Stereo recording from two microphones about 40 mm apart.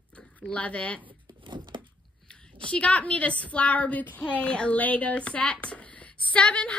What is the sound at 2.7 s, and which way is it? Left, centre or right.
Speech, left.